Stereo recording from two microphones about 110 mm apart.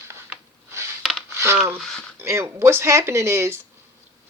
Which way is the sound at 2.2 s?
25° right (ahead or behind).